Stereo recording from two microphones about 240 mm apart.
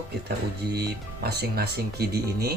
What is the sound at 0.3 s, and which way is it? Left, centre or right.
Speech, right.